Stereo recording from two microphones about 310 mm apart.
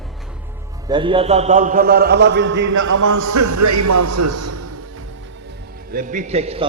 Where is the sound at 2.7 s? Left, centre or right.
Right.